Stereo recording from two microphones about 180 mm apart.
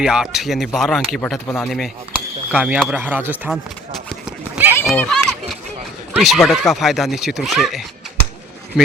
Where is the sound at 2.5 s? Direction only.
5° right (ahead or behind).